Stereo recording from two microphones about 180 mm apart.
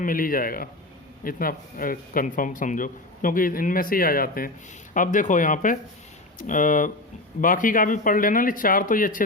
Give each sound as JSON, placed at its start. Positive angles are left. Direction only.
{"t": 0.0, "sound": "speech", "side_deg": 50}